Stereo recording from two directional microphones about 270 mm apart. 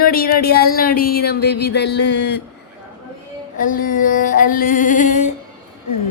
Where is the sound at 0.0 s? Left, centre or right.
Left.